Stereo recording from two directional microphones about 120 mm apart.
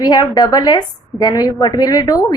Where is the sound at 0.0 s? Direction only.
35° left (ahead or behind).